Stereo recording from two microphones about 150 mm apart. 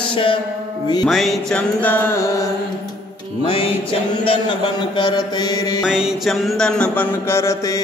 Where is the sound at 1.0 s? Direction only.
Centre (ahead or behind).